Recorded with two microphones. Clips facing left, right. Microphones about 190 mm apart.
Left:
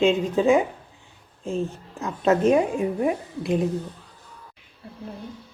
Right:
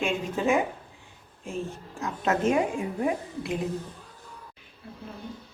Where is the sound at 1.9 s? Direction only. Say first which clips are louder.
Left 6 dB; 20° left (ahead or behind).